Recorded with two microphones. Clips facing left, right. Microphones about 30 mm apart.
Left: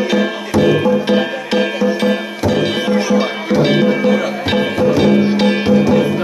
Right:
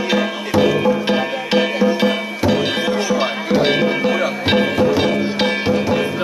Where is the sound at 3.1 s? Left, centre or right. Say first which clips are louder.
Left 2 dB; centre.